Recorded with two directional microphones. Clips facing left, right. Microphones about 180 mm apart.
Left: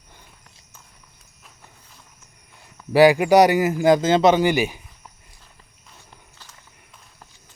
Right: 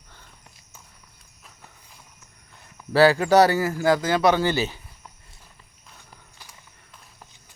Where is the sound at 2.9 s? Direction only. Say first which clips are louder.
Left 3 dB; 15° left (ahead or behind).